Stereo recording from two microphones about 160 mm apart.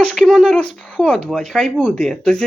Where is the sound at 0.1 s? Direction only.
Centre (ahead or behind).